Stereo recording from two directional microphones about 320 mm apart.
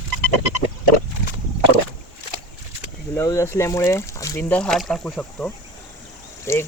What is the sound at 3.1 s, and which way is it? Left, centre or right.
Speech, centre.